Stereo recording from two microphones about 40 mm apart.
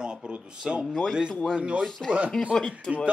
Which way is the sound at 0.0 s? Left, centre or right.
Right.